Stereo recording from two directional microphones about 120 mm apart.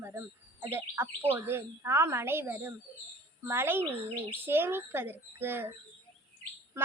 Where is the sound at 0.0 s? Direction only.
20° right (ahead or behind).